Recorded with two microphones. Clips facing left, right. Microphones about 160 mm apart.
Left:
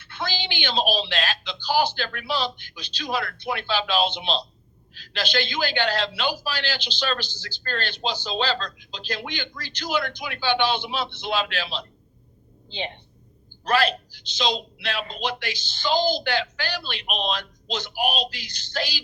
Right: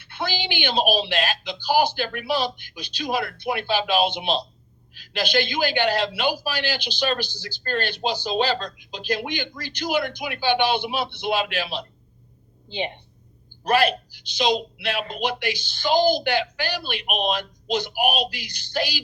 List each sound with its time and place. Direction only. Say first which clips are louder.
0.0 s speech: right 2 dB; 15° right (ahead or behind)
12.6 s a woman's voice: right 4 dB; 15° right (ahead or behind)
14.9 s a man's voice: right 3 dB; 55° right (ahead or behind)
15.2 s speech: right 3 dB; 10° right (ahead or behind)